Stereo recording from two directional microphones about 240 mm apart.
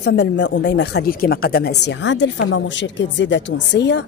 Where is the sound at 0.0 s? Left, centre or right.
Left.